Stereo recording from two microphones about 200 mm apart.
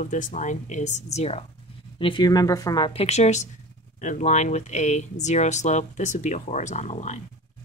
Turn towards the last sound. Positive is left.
turn(degrees=35)  # may be behind; listen again after turning